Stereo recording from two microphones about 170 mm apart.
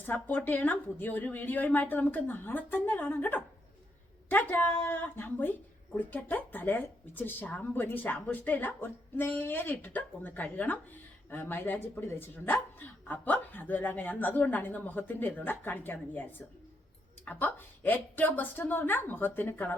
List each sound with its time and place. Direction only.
0.0 s speech: 10° left (ahead or behind)